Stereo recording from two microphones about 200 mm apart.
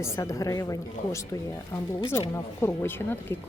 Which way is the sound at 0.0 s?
15° left (ahead or behind).